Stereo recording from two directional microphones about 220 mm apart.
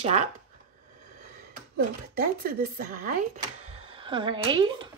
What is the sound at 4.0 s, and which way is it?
Speech, 20° right (ahead or behind).